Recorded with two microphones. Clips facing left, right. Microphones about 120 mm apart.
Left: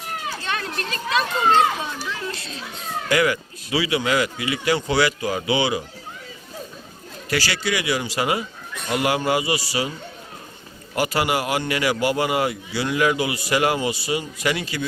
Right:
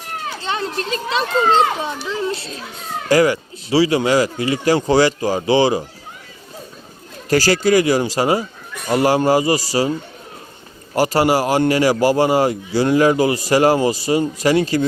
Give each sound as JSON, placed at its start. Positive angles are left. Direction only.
{"t": 0.4, "sound": "a child's voice", "side_deg": -25}
{"t": 7.3, "sound": "a man's voice", "side_deg": -40}
{"t": 10.9, "sound": "a man's voice", "side_deg": -35}